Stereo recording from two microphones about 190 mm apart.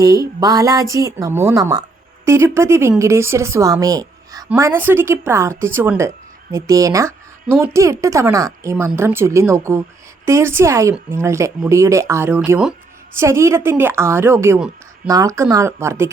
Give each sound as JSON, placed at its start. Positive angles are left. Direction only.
{"t": 0.0, "sound": "a woman's voice", "side_deg": -20}